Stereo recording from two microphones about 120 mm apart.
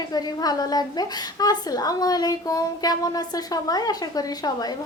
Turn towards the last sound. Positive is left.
turn(degrees=35)  # may be behind; listen again after turning